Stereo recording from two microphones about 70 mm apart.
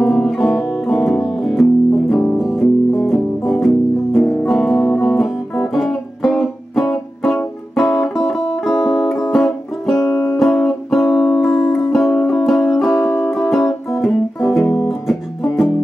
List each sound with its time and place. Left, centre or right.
0.0 s music: centre
10.0 s music: left
10.4 s music: centre